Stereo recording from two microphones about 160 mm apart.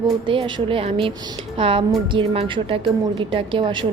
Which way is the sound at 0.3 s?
30° right (ahead or behind).